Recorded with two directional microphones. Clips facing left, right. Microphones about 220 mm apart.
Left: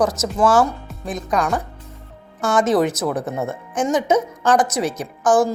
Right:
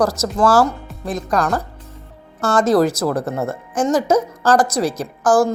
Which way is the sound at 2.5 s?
Centre (ahead or behind).